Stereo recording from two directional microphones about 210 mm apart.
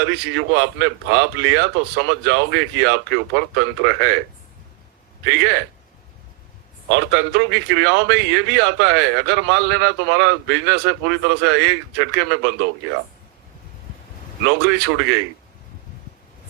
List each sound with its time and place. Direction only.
0.0 s a man's voice: 60° right (ahead or behind)
5.2 s a man's voice: 60° right (ahead or behind)
6.9 s a man's voice: 60° right (ahead or behind)
14.7 s a man's voice: 60° right (ahead or behind)